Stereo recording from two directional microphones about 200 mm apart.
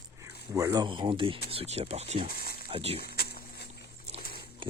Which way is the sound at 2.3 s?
50° left (ahead or behind).